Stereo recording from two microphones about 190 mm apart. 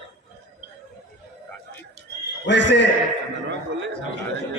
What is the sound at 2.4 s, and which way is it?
Speech, 70° left (ahead or behind).